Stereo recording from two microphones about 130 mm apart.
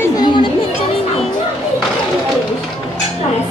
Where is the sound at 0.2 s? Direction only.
35° left (ahead or behind).